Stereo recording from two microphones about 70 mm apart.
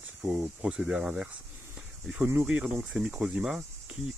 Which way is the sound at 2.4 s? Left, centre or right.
Centre.